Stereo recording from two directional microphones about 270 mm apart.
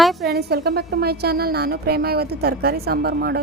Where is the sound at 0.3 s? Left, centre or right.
Right.